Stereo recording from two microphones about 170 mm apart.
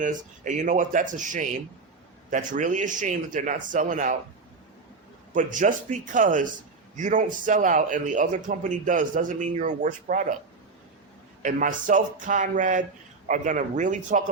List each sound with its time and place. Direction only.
0.0 s a man's voice: 50° right (ahead or behind)
5.3 s a man's voice: 50° right (ahead or behind)
11.4 s a man's voice: 50° right (ahead or behind)